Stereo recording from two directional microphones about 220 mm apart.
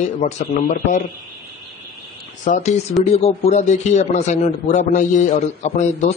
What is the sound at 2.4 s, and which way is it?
Speech, 35° left (ahead or behind).